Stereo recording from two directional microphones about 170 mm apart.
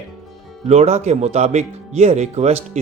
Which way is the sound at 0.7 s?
40° right (ahead or behind).